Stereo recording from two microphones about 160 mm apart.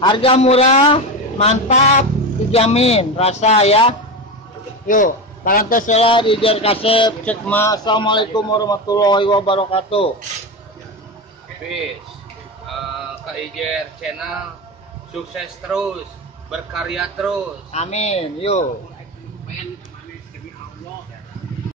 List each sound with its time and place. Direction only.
0.0 s a man's voice: 30° left (ahead or behind)
4.8 s a man's voice: 55° left (ahead or behind)
5.9 s a man's voice: 35° left (ahead or behind)
7.2 s a man's voice: 10° left (ahead or behind); by 10.0 s 35° left (ahead or behind)
13.6 s speech: centre (ahead or behind)
15.3 s speech: 5° right (ahead or behind)
17.7 s speech: 45° left (ahead or behind)